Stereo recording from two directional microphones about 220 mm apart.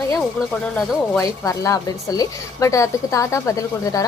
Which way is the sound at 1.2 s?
15° left (ahead or behind).